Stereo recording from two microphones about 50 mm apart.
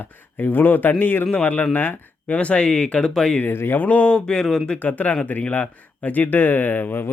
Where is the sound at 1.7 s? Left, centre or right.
Left.